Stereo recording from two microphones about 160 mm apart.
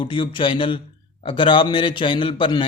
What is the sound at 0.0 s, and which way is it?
A man's voice, 30° left (ahead or behind).